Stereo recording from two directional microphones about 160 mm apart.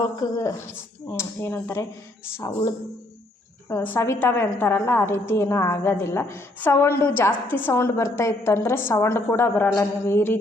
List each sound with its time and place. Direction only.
0.2 s a woman's voice: 20° left (ahead or behind)
3.7 s a woman's voice: 15° left (ahead or behind)